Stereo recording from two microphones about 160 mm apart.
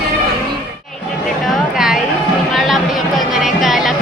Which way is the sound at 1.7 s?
5° right (ahead or behind).